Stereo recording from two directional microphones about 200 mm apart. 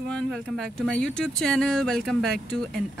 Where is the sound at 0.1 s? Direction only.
5° left (ahead or behind).